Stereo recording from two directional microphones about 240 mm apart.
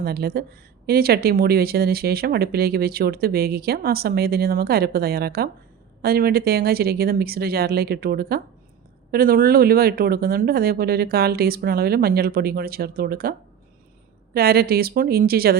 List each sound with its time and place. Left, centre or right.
0.0 s speech: right
14.3 s speech: right